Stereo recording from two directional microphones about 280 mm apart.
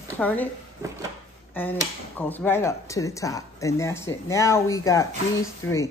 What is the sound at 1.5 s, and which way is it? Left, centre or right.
Speech, centre.